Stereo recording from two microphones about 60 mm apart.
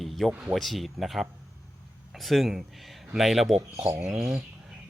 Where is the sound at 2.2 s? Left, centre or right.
Centre.